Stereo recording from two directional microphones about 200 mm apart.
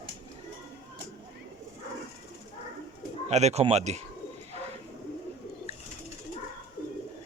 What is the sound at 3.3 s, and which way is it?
Speech, 35° right (ahead or behind).